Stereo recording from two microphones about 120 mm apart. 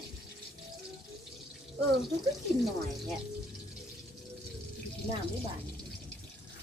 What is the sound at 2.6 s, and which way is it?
Speech, centre (ahead or behind).